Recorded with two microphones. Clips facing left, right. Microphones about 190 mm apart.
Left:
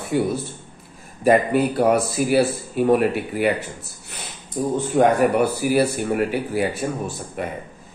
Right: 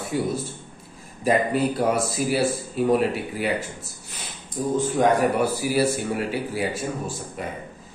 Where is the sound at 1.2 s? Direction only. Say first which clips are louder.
Left 4 dB; 60° left (ahead or behind).